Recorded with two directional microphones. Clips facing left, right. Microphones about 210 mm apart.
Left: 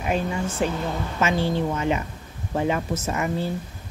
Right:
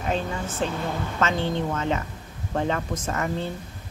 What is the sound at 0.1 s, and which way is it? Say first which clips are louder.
Speech: left 3 dB; 10° left (ahead or behind).